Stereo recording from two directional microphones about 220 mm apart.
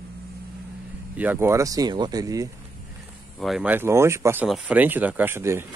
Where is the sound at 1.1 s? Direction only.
10° right (ahead or behind).